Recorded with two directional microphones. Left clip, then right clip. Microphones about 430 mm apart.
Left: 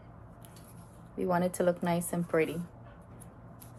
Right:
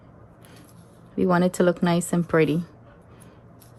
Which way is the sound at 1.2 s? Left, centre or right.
Right.